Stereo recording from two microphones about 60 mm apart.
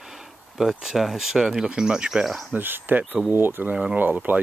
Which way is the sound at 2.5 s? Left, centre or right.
Right.